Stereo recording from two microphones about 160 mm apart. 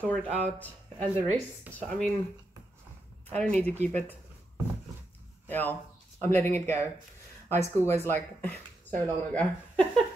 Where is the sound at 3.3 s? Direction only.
5° left (ahead or behind).